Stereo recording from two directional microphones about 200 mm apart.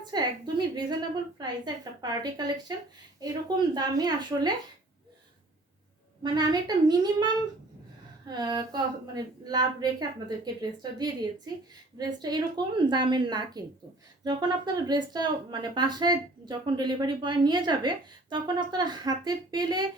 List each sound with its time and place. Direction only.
0.1 s speech: 20° right (ahead or behind)
3.8 s speech: 20° right (ahead or behind)
6.2 s speech: 20° right (ahead or behind)
8.3 s speech: 20° right (ahead or behind)